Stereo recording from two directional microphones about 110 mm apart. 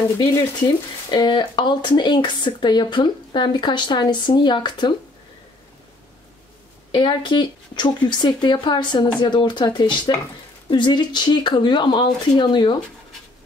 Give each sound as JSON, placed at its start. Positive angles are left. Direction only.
{"t": 1.1, "sound": "speech", "side_deg": 40}
{"t": 6.9, "sound": "speech", "side_deg": 45}